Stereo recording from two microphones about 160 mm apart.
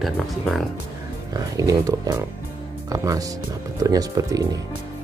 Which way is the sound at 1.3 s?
20° right (ahead or behind).